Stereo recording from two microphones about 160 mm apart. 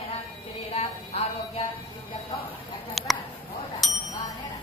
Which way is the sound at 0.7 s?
40° left (ahead or behind).